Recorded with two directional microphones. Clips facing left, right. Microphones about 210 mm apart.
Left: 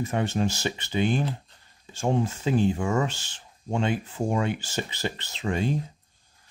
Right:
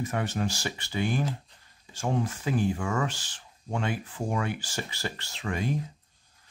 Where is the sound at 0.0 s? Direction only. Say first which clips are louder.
Left 4 dB; 25° left (ahead or behind).